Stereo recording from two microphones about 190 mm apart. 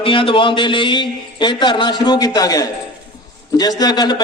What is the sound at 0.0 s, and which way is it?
A man's voice, 25° left (ahead or behind).